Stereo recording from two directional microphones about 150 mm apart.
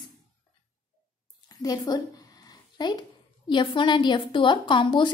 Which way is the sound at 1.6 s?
25° left (ahead or behind).